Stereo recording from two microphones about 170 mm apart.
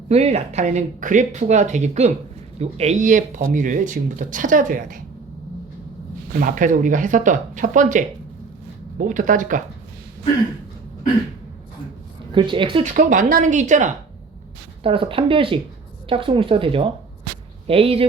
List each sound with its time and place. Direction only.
0.1 s speech: 40° right (ahead or behind)
6.4 s speech: 50° right (ahead or behind)
12.3 s a woman's voice: 30° right (ahead or behind)
12.8 s speech: 45° right (ahead or behind)
14.8 s speech: 30° right (ahead or behind)